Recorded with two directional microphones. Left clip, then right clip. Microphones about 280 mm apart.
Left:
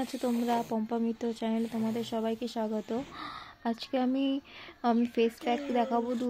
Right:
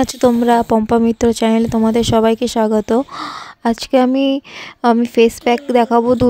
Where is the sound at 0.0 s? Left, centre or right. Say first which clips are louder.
Right 19 dB; right.